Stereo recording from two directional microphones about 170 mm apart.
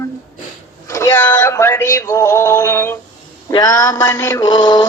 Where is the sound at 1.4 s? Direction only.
15° left (ahead or behind).